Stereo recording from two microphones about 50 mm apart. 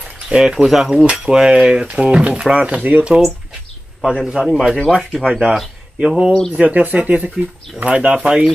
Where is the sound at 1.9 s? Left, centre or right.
Right.